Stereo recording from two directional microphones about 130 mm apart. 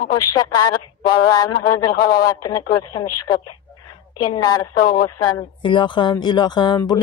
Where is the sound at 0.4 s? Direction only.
30° left (ahead or behind).